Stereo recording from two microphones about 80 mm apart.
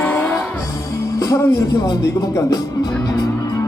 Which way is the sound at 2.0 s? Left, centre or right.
Left.